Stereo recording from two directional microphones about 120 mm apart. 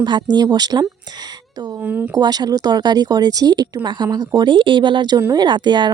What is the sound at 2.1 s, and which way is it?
A woman's voice, 35° right (ahead or behind).